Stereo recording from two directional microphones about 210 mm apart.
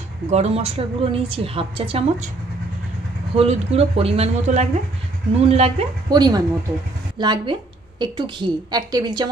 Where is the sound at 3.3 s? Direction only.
30° right (ahead or behind).